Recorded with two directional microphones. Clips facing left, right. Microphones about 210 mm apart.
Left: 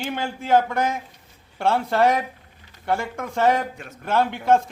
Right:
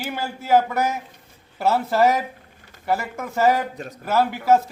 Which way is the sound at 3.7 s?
35° right (ahead or behind).